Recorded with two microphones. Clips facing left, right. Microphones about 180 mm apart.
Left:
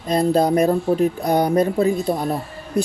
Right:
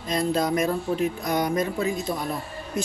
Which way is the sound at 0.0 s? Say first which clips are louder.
Left 7 dB; 35° left (ahead or behind).